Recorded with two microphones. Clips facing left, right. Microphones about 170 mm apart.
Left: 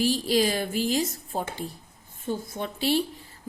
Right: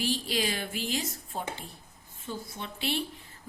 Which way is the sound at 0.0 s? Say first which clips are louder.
Left 7 dB; 40° left (ahead or behind).